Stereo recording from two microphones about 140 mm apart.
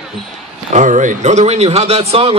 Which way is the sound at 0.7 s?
60° right (ahead or behind).